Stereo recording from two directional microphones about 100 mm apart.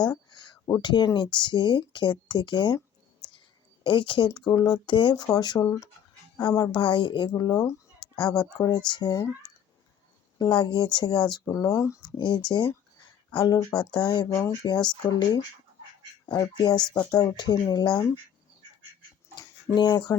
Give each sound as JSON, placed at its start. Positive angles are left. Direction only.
{"t": 0.0, "sound": "a sound", "side_deg": 45}
{"t": 0.8, "sound": "speech", "side_deg": 50}
{"t": 3.8, "sound": "speech", "side_deg": 55}
{"t": 5.1, "sound": "speech", "side_deg": 40}
{"t": 5.6, "sound": "speech", "side_deg": 35}
{"t": 7.3, "sound": "speech", "side_deg": 35}
{"t": 10.3, "sound": "speech", "side_deg": 45}
{"t": 11.4, "sound": "speech", "side_deg": 30}
{"t": 12.1, "sound": "speech", "side_deg": 50}
{"t": 16.3, "sound": "speech", "side_deg": 45}
{"t": 16.8, "sound": "speech", "side_deg": 10}
{"t": 17.1, "sound": "speech", "side_deg": 40}
{"t": 19.7, "sound": "speech", "side_deg": 45}